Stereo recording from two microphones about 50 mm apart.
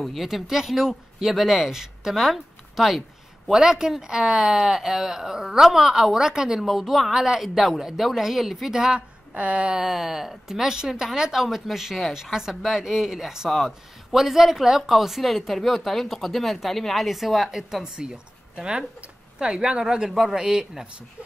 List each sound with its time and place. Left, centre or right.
0.0 s speech: centre
9.3 s speech: right
9.8 s speech: centre
20.1 s speech: centre